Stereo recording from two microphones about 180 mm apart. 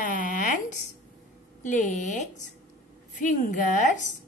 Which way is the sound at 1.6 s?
40° left (ahead or behind).